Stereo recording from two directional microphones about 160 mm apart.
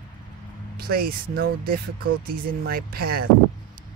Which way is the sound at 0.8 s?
70° right (ahead or behind).